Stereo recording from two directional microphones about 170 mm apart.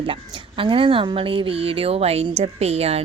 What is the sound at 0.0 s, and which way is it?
Speech, 30° right (ahead or behind).